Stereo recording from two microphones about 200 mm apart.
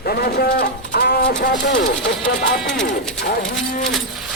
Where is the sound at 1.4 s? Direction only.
55° left (ahead or behind).